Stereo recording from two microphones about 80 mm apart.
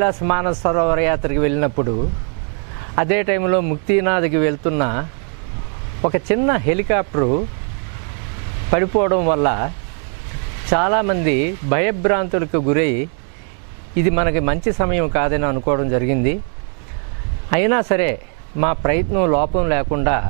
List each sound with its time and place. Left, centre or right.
0.0 s speech: right
6.0 s speech: centre
8.6 s speech: centre
10.7 s speech: centre
17.5 s speech: centre